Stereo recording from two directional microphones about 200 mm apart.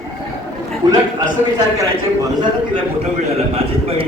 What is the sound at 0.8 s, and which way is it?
Speech, 20° right (ahead or behind).